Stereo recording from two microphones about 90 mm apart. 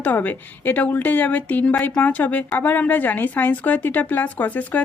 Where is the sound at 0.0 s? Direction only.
20° left (ahead or behind).